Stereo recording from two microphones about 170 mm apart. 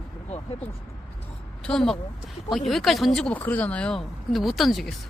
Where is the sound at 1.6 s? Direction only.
5° left (ahead or behind).